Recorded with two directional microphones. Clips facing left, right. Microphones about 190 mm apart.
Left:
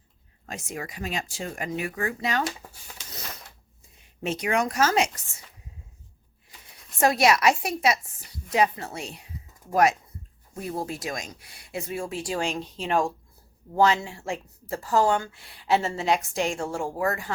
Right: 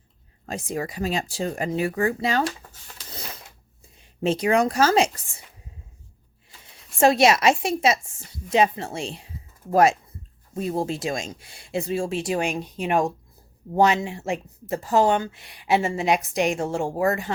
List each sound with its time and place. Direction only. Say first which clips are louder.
0.4 s speech: right 7 dB; 35° right (ahead or behind)
4.2 s speech: right 5 dB; 30° right (ahead or behind)
7.0 s speech: right 3 dB; 25° right (ahead or behind)